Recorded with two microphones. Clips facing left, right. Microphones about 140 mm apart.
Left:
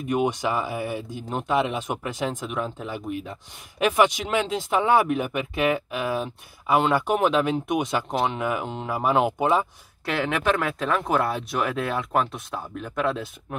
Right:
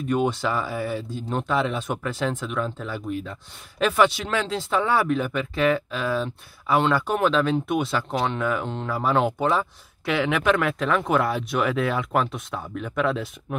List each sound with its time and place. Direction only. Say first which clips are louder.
0.1 s speech: even; 15° left (ahead or behind)
10.0 s speech: right 2 dB; centre (ahead or behind)